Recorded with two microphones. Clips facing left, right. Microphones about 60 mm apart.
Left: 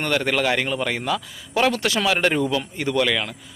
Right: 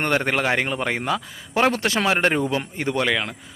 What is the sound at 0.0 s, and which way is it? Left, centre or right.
A man's voice, right.